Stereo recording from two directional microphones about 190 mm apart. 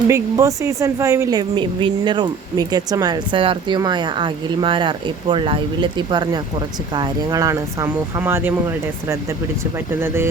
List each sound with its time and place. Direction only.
0.1 s a woman's voice: 15° right (ahead or behind)
9.7 s speech: 10° right (ahead or behind)